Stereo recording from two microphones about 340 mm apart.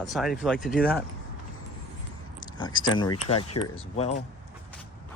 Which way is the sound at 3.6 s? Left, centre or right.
Left.